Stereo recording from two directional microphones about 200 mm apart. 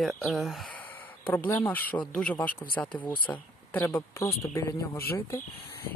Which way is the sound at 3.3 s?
10° left (ahead or behind).